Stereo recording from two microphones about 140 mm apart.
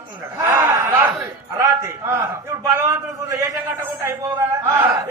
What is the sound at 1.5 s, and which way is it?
Speech, 20° right (ahead or behind).